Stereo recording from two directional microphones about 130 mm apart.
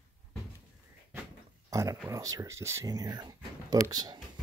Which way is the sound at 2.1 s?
25° right (ahead or behind).